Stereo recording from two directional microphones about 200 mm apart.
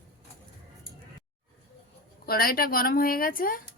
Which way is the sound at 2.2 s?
50° left (ahead or behind).